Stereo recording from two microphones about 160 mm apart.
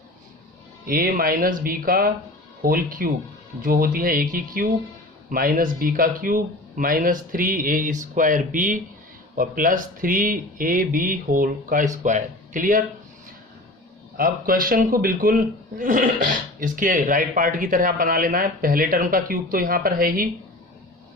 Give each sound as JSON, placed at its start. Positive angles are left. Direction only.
{"t": 0.9, "sound": "speech", "side_deg": -65}
{"t": 14.2, "sound": "speech", "side_deg": -65}